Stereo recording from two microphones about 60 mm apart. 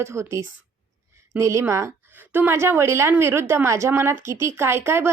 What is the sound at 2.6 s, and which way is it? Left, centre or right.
Speech, right.